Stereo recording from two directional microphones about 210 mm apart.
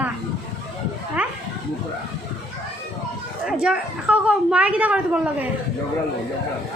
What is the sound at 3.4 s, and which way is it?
A woman's voice, 5° right (ahead or behind).